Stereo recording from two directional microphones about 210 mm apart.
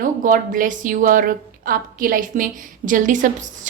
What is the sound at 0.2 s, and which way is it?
A woman's voice, 40° right (ahead or behind).